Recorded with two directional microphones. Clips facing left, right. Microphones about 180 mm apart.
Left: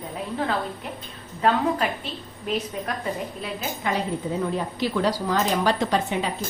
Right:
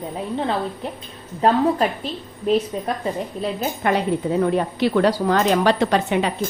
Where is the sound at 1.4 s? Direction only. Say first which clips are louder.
Right 4 dB; 35° right (ahead or behind).